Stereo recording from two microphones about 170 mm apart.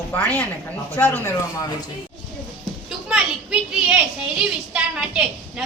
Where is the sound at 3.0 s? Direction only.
5° right (ahead or behind).